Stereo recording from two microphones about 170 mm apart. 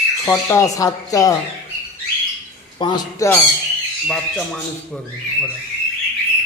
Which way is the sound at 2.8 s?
25° left (ahead or behind).